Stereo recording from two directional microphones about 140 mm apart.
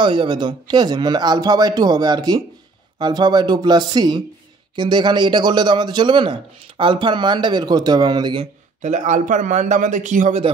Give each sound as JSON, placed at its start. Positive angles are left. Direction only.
{"t": 0.0, "sound": "speech", "side_deg": -35}
{"t": 8.8, "sound": "speech", "side_deg": -60}